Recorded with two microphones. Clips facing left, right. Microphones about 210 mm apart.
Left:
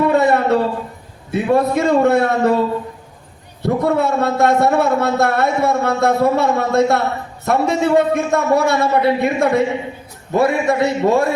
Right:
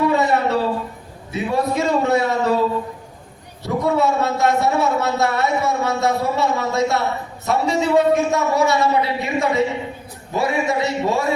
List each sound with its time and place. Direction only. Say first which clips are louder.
0.1 s a sound: left 4 dB; 55° left (ahead or behind)
1.3 s a man's voice: left 5 dB; 55° left (ahead or behind)
3.6 s a man's voice: left 2 dB; 55° left (ahead or behind)